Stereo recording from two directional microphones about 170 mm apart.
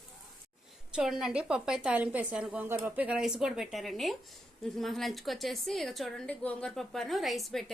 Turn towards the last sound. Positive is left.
turn(degrees=0)  # may be behind; listen again after turning